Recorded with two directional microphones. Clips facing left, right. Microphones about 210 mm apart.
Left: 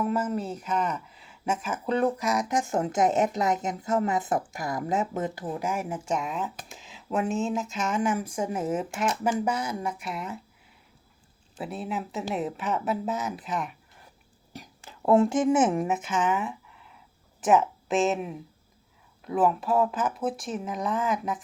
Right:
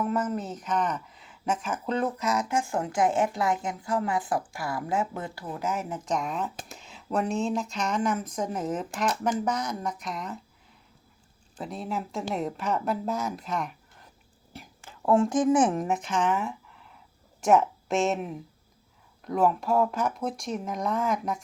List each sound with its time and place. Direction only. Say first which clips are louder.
0.3 s speech: left 1 dB; 10° left (ahead or behind)
11.5 s speech: left 1 dB; 5° left (ahead or behind)
15.2 s speech: even; 25° left (ahead or behind)
15.7 s speech: left 1 dB; 10° left (ahead or behind)